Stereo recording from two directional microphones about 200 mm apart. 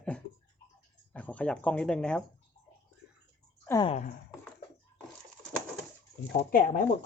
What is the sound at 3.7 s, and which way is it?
Speech, 20° left (ahead or behind).